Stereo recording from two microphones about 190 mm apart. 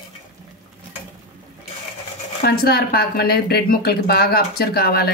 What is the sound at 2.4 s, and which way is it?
Speech, 50° left (ahead or behind).